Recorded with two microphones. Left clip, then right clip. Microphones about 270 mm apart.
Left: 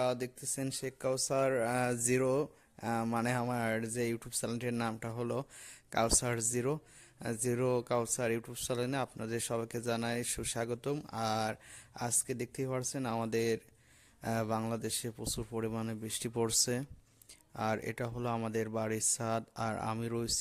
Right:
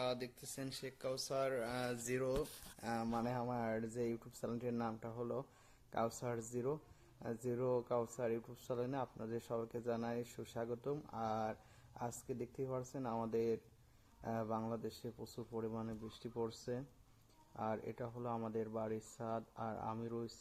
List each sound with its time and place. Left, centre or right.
0.0 s speech: left
3.1 s speech: left
4.9 s speech: left